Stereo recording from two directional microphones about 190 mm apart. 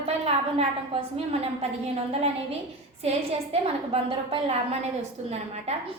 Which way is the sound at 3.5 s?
30° right (ahead or behind).